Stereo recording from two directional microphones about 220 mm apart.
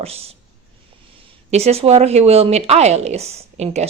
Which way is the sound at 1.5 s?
30° right (ahead or behind).